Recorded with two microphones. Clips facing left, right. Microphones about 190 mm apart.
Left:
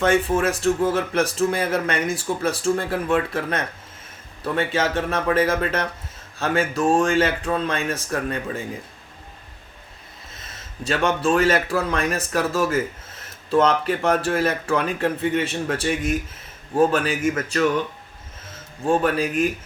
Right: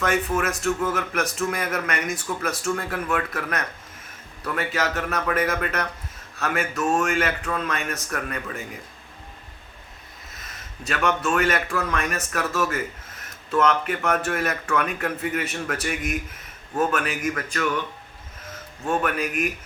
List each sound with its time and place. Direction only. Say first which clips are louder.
0.0 s a man's voice: left 4 dB; 30° left (ahead or behind)
10.3 s a man's voice: left 4 dB; 25° left (ahead or behind)
18.9 s speech: left 5 dB; 30° left (ahead or behind)